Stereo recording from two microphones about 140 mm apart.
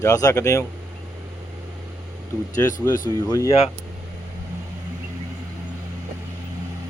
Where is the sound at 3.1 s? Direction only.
25° left (ahead or behind).